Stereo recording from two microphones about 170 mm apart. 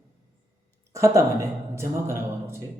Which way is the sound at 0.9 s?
15° right (ahead or behind).